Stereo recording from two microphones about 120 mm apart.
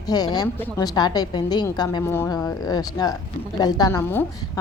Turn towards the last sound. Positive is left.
turn(degrees=25)  # may be behind; listen again after turning